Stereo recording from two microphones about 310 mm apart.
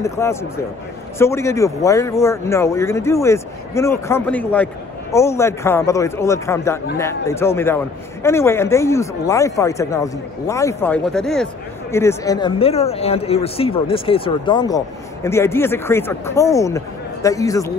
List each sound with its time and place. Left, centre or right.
0.0 s a man's voice: centre